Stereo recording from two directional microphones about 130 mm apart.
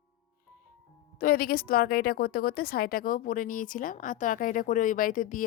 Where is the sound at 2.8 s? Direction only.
90° left.